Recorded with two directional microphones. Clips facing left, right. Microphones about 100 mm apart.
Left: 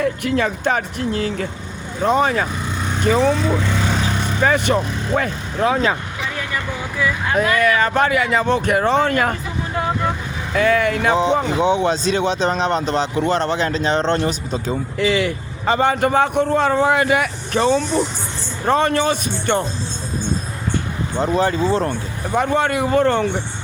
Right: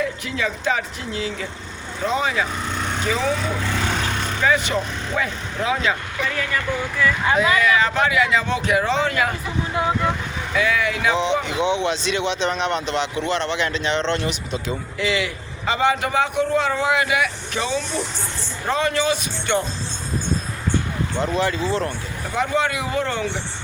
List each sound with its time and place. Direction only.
0.0 s speech: 50° left (ahead or behind)
2.6 s vehicle: 5° left (ahead or behind)
4.0 s vehicle: 10° left (ahead or behind)
4.4 s speech: 50° left (ahead or behind)
6.2 s vehicle: 25° left (ahead or behind)
7.3 s speech: 50° left (ahead or behind)
10.5 s speech: 45° left (ahead or behind)
21.3 s speech: 35° left (ahead or behind)
22.4 s speech: 50° left (ahead or behind)